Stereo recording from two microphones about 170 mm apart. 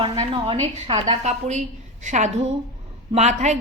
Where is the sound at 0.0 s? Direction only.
30° right (ahead or behind).